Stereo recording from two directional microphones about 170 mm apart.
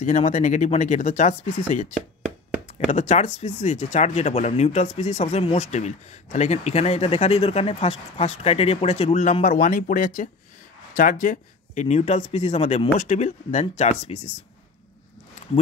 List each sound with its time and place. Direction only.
0.0 s speech: 45° left (ahead or behind)
2.9 s speech: 40° left (ahead or behind)